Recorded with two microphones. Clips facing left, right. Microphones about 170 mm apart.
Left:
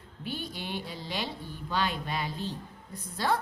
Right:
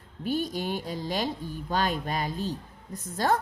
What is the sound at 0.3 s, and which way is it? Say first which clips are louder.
A woman's voice: right 8 dB; 45° right (ahead or behind).